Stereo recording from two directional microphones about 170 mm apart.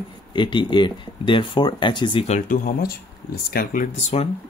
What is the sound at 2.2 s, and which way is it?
Speech, 45° left (ahead or behind).